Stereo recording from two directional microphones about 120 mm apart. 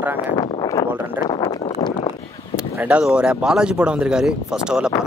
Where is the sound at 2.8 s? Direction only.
10° right (ahead or behind).